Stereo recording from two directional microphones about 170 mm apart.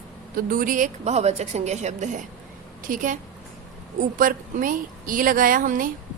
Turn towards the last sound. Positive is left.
turn(degrees=-55)  # may be behind; listen again after turning